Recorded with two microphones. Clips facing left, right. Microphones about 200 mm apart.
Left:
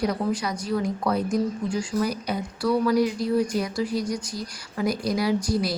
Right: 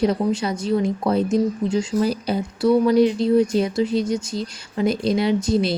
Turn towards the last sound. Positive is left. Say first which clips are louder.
# right 4 dB
turn(degrees=-25)  # may be behind; listen again after turning